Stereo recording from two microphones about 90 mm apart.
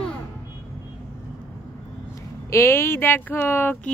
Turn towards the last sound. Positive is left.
turn(degrees=25)  # may be behind; listen again after turning